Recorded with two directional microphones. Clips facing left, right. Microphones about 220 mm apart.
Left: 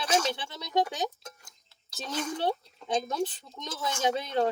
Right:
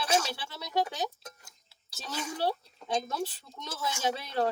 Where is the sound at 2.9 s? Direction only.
20° left (ahead or behind).